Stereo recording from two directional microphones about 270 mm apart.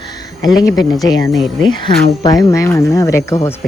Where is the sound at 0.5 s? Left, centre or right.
Centre.